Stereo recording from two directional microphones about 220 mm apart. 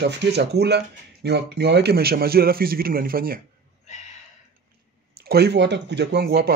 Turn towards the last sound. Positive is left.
turn(degrees=-45)  # may be behind; listen again after turning